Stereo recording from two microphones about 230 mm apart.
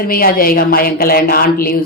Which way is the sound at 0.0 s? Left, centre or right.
Left.